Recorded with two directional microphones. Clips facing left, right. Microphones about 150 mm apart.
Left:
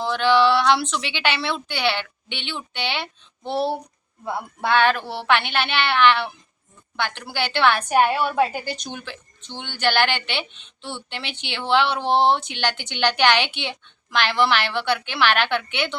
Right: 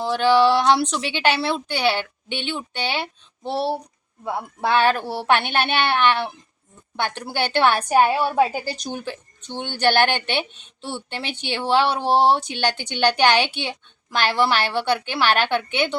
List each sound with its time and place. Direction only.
0.1 s a woman's voice: 40° right (ahead or behind)
3.4 s speech: 5° right (ahead or behind)
4.8 s speech: 45° right (ahead or behind)
7.3 s speech: 45° right (ahead or behind)
8.1 s a woman's voice: 30° right (ahead or behind)
8.8 s a woman's voice: 40° right (ahead or behind)